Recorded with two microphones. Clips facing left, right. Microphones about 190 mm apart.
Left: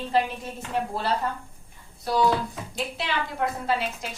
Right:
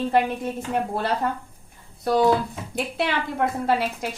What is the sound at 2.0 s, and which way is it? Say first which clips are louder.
A woman's voice: right 4 dB; 55° right (ahead or behind).